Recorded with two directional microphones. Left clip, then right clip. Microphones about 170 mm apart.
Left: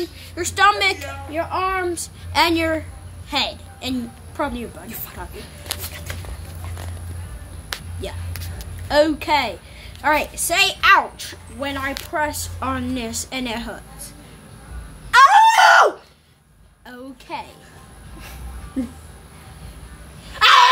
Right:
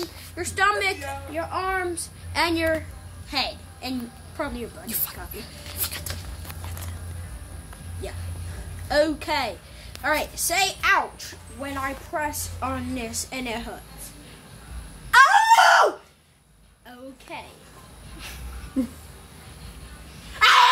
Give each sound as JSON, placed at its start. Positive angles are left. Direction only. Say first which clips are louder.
{"t": 0.4, "sound": "a woman's voice", "louder": "left 6 dB", "side_deg": 55}
{"t": 4.8, "sound": "a woman's voice", "louder": "right 1 dB", "side_deg": -60}
{"t": 8.0, "sound": "a woman's voice", "louder": "left 5 dB", "side_deg": 50}
{"t": 15.0, "sound": "screaming", "louder": "left 4 dB", "side_deg": -35}
{"t": 17.3, "sound": "speech", "louder": "left 7 dB", "side_deg": 75}
{"t": 20.3, "sound": "a sound", "louder": "left 4 dB", "side_deg": -35}